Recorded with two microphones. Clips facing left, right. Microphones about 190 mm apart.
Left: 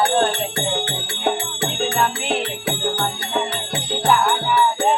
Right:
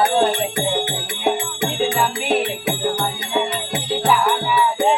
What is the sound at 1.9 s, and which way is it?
Music, 5° right (ahead or behind).